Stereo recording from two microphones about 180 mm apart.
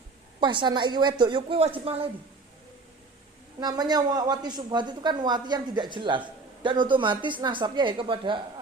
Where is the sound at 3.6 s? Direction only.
20° right (ahead or behind).